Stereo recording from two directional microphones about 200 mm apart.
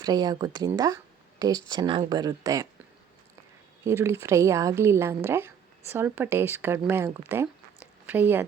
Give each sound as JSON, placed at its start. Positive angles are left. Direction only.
{"t": 0.0, "sound": "speech", "side_deg": -20}
{"t": 3.8, "sound": "a woman's voice", "side_deg": -15}